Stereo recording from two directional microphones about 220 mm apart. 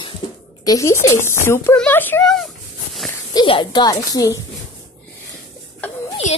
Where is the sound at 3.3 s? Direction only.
20° left (ahead or behind).